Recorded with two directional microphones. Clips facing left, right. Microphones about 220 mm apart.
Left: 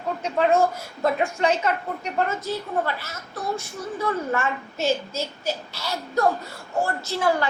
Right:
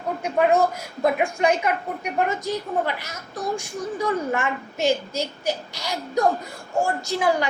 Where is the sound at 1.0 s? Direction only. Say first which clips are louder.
Right 1 dB; 15° right (ahead or behind).